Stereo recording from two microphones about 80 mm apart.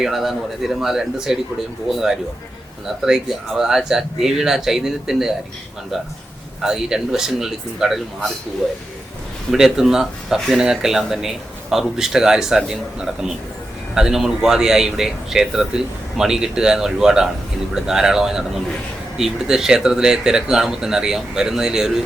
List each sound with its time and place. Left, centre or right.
0.0 s speech: centre
6.6 s speech: centre
9.5 s speech: centre